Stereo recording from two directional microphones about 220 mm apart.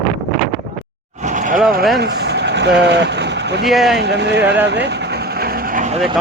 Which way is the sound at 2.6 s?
50° right (ahead or behind).